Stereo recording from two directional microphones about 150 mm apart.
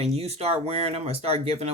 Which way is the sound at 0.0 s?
45° right (ahead or behind).